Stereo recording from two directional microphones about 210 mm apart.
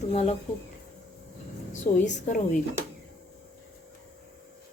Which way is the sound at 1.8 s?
35° left (ahead or behind).